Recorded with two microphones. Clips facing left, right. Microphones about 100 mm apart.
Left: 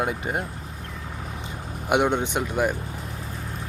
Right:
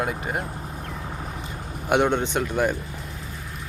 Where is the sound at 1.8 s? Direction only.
10° left (ahead or behind).